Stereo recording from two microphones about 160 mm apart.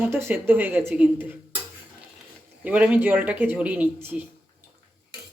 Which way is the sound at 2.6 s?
10° right (ahead or behind).